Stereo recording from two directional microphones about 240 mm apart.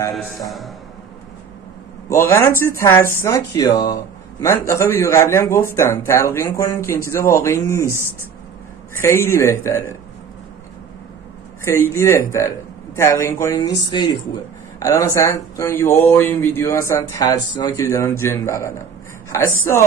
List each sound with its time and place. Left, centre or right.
2.0 s speech: centre
8.9 s speech: centre
11.6 s speech: centre